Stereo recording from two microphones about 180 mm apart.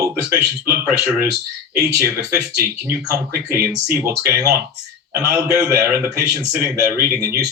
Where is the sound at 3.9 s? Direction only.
20° right (ahead or behind).